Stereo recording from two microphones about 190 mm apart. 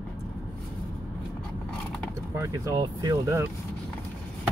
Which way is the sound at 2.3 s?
15° right (ahead or behind).